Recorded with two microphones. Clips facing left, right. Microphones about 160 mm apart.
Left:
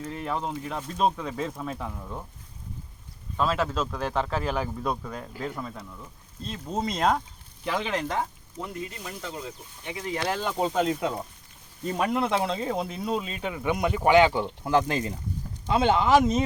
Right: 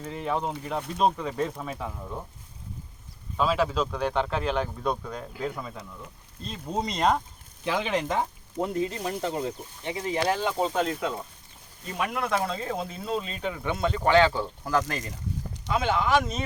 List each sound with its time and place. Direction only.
0.0 s speech: centre (ahead or behind)
3.3 s speech: centre (ahead or behind)
8.6 s speech: 35° right (ahead or behind)
10.2 s speech: 5° right (ahead or behind)
10.6 s speech: 15° left (ahead or behind)
11.9 s speech: 30° left (ahead or behind)